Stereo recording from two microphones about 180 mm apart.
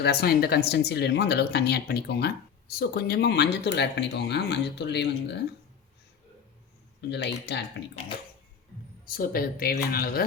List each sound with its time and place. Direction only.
0.0 s speech: 60° left (ahead or behind)
7.1 s speech: 70° left (ahead or behind)
9.0 s speech: 55° left (ahead or behind)